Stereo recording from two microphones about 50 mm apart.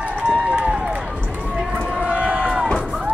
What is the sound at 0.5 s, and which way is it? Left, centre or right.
Run, centre.